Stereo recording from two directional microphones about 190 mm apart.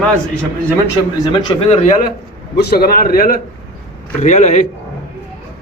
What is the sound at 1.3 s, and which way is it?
Speech, 25° left (ahead or behind).